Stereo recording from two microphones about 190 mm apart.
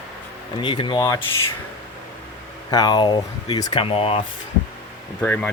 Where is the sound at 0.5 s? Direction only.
25° left (ahead or behind).